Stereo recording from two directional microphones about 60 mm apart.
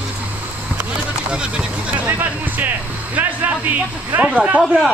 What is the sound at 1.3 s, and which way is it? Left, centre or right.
Speech, centre.